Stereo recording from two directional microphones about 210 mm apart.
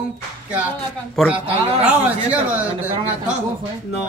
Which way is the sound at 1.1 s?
5° right (ahead or behind).